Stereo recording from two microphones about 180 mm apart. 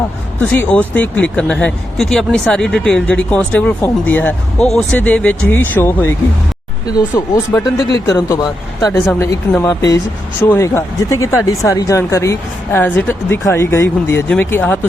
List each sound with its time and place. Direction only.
0.3 s speech: 10° left (ahead or behind)